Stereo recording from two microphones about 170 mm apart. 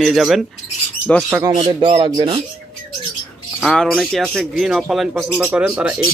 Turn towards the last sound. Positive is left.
turn(degrees=-5)  # may be behind; listen again after turning